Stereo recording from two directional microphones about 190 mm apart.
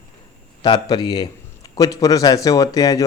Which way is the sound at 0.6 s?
20° left (ahead or behind).